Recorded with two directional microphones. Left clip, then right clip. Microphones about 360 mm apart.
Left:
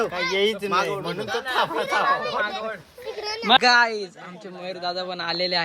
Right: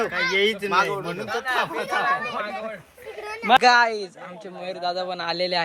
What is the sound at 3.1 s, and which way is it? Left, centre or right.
Children playing, left.